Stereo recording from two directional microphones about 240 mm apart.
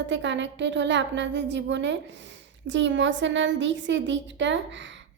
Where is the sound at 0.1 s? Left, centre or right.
Right.